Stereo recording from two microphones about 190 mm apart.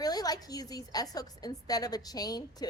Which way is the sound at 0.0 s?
20° left (ahead or behind).